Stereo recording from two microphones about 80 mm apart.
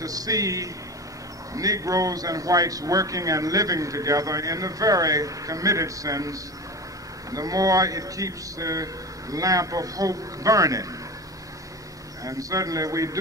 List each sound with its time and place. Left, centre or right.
0.0 s a man's voice: right
12.3 s a man's voice: right